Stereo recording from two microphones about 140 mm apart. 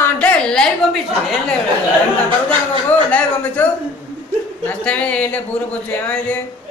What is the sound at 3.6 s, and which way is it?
Speech, 15° left (ahead or behind).